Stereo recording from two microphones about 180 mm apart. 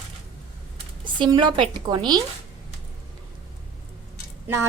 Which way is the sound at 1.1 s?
25° right (ahead or behind).